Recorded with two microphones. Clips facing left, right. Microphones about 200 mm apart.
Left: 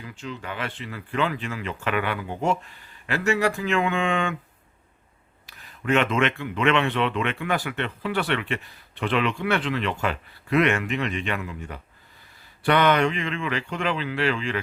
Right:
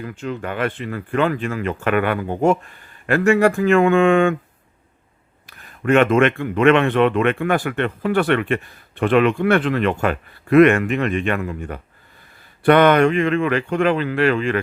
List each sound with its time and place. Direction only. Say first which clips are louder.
0.0 s speech: right 8 dB; 55° right (ahead or behind)
5.5 s speech: right 6 dB; 50° right (ahead or behind)